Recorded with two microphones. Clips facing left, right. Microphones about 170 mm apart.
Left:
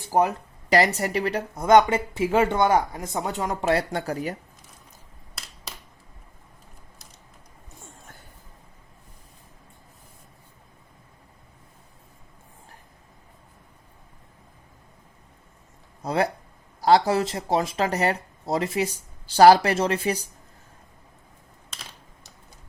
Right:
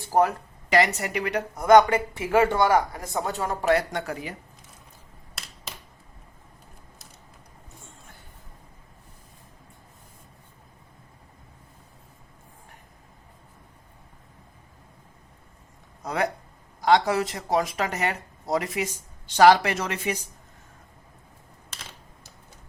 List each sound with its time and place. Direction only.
0.0 s speech: 20° left (ahead or behind)
0.7 s speech: 35° left (ahead or behind)
16.0 s a sound: 30° left (ahead or behind)
16.8 s speech: 30° left (ahead or behind)